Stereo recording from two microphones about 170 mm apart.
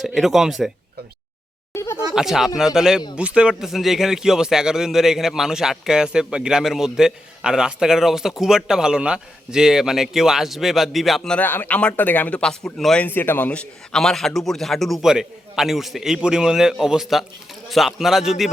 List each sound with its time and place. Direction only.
0.0 s a man's voice: centre (ahead or behind)
1.7 s a sound: 15° left (ahead or behind)
2.1 s a man's voice: centre (ahead or behind)